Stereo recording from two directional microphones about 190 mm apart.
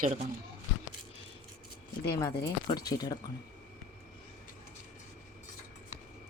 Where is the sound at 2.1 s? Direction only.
15° left (ahead or behind).